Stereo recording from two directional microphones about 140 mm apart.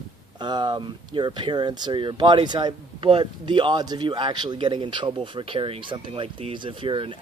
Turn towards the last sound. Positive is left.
turn(degrees=-40)  # may be behind; listen again after turning